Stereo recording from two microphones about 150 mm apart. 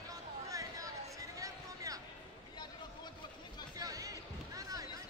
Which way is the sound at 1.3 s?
25° right (ahead or behind).